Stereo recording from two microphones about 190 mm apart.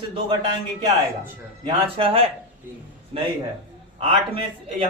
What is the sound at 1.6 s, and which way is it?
A man's voice, 30° right (ahead or behind).